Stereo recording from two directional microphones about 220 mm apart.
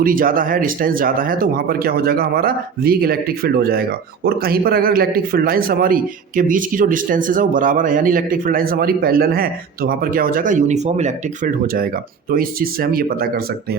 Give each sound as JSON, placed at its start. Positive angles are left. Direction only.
{"t": 0.0, "sound": "speech", "side_deg": -40}